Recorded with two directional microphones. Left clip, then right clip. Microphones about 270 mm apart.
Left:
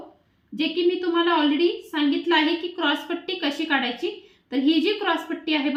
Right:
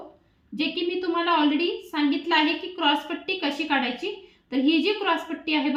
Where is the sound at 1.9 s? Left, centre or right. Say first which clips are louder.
Left 2 dB; centre.